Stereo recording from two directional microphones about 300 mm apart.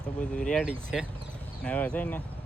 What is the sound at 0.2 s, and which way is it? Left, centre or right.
Speech, centre.